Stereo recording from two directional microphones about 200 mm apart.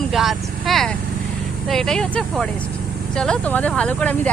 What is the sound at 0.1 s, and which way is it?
Vehicle, centre (ahead or behind).